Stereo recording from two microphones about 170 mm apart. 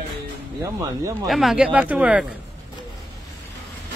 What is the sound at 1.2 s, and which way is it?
Speech, centre (ahead or behind).